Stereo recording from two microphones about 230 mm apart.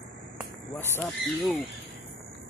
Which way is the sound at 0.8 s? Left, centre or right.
Centre.